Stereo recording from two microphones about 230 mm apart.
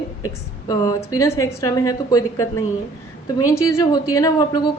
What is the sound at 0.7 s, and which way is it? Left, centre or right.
A woman's voice, centre.